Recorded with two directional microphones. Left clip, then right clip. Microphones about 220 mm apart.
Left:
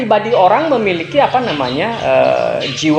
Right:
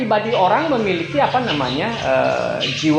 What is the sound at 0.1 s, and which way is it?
Speech, 35° left (ahead or behind).